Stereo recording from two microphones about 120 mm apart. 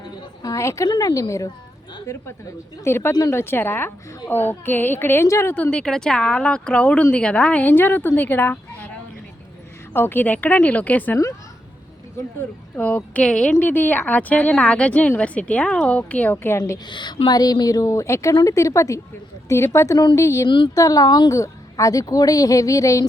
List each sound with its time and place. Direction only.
0.4 s a woman's voice: 25° left (ahead or behind)
5.8 s speech: 5° left (ahead or behind)
9.9 s speech: 15° left (ahead or behind)
12.7 s speech: 15° left (ahead or behind)
16.8 s a woman's voice: 40° left (ahead or behind)